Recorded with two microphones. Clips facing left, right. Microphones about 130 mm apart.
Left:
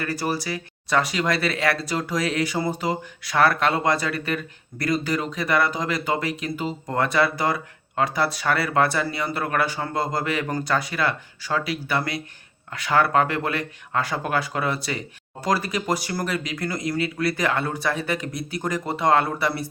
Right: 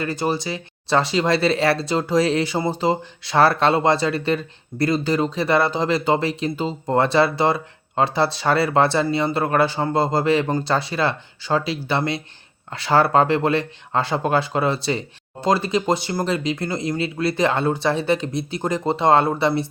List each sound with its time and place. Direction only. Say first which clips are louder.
0.0 s speech: right 3 dB; 25° right (ahead or behind)